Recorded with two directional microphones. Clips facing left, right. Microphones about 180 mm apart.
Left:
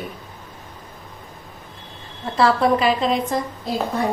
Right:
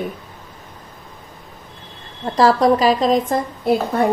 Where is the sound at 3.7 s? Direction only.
60° right (ahead or behind).